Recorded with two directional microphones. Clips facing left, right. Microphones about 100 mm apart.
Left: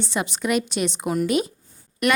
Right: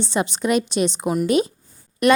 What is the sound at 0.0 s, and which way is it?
Speech, 25° right (ahead or behind).